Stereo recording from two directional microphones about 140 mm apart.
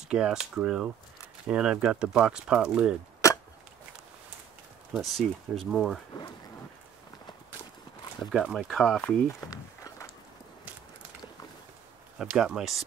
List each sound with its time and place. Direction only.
0.1 s speech: 5° right (ahead or behind)
4.9 s speech: centre (ahead or behind)
8.2 s speech: centre (ahead or behind)
9.5 s a sound: 25° left (ahead or behind)
12.2 s speech: 5° right (ahead or behind)